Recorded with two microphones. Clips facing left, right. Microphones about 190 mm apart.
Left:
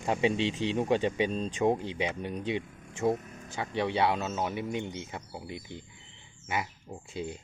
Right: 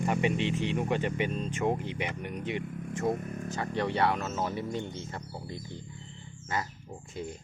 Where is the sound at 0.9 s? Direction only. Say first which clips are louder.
Left 3 dB; 15° left (ahead or behind).